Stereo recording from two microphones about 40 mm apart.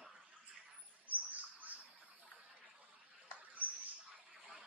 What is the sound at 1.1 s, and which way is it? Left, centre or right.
Bird, right.